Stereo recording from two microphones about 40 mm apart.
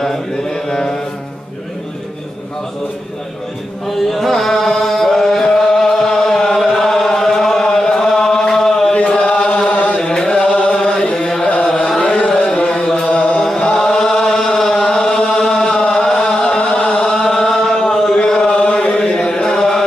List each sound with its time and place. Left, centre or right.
0.0 s mantra: centre
3.8 s chant: centre
8.9 s chant: left
9.7 s chant: left
10.0 s music: centre
11.6 s carnatic music: centre
12.1 s a sound: centre
12.6 s mantra: centre
13.6 s chant: centre
17.0 s chant: centre
19.0 s chant: centre